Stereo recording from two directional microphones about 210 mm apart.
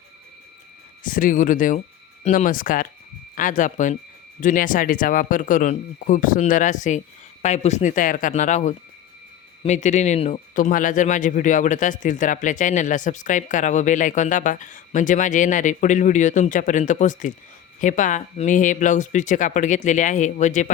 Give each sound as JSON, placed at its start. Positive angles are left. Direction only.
{"t": 1.0, "sound": "speech", "side_deg": 40}